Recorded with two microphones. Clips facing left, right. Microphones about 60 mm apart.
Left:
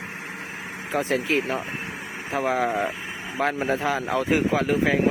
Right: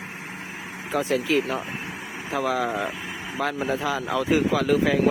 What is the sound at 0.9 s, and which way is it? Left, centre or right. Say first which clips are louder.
Speech: right 1 dB; left.